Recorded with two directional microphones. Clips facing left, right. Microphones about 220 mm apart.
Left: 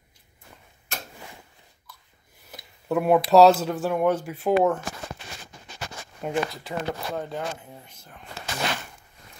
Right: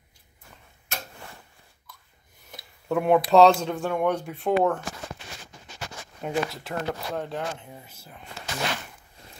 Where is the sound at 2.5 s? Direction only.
5° left (ahead or behind).